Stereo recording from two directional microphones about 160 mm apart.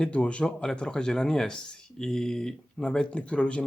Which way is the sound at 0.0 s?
5° left (ahead or behind).